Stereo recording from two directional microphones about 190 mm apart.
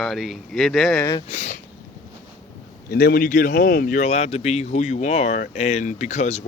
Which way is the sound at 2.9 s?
55° left (ahead or behind).